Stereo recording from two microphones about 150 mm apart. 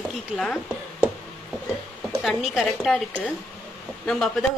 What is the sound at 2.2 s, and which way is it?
Speech, centre (ahead or behind).